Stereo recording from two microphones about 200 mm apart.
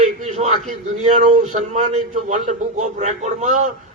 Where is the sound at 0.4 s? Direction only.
35° right (ahead or behind).